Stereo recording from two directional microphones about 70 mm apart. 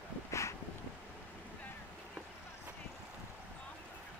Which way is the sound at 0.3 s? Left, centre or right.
Left.